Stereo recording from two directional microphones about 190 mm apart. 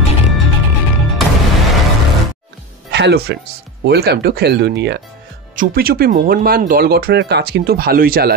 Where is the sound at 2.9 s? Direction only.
65° right (ahead or behind).